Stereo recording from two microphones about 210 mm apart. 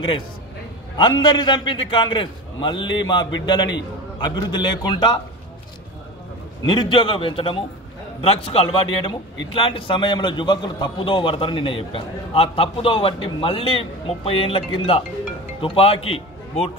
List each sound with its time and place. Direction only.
1.2 s a man's voice: 20° left (ahead or behind)
6.7 s a man's voice: 25° left (ahead or behind)